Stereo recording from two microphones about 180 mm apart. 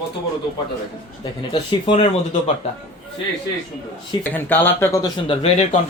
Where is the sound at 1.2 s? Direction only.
25° left (ahead or behind).